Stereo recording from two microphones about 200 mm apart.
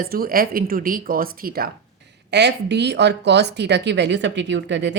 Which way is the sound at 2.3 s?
60° right (ahead or behind).